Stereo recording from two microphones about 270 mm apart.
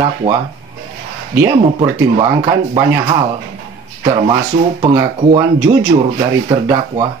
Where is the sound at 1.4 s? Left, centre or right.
Centre.